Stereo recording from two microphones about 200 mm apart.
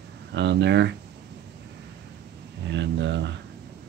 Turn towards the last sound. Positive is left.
turn(degrees=-60)  # may be behind; listen again after turning